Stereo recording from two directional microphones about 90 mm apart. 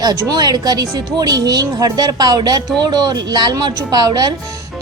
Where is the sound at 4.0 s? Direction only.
45° right (ahead or behind).